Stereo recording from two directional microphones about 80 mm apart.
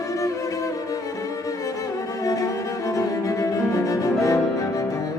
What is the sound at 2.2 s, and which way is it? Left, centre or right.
Cello, left.